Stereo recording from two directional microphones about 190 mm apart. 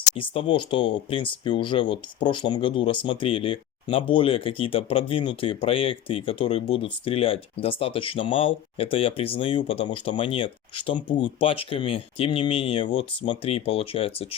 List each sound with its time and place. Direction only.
0.2 s speech: 25° left (ahead or behind)